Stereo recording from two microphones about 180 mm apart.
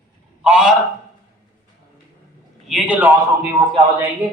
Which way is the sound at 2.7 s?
5° right (ahead or behind).